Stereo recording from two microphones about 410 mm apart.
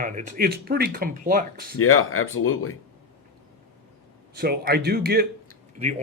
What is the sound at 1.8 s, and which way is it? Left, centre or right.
Speech, left.